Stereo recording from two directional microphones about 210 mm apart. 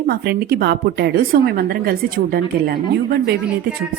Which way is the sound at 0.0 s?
50° right (ahead or behind).